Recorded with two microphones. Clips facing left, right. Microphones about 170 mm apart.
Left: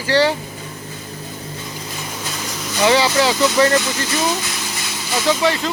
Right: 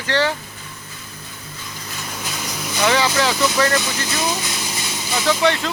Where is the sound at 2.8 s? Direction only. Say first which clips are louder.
Left 3 dB; 20° left (ahead or behind).